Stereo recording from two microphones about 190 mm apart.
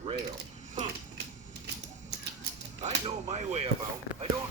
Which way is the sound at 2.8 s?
40° right (ahead or behind).